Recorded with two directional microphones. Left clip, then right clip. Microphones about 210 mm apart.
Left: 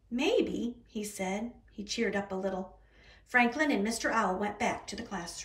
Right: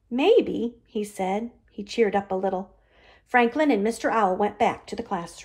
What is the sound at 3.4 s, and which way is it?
Speech, 5° right (ahead or behind).